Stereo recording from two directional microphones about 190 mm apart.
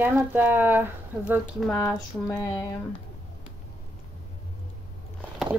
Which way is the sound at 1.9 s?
15° left (ahead or behind).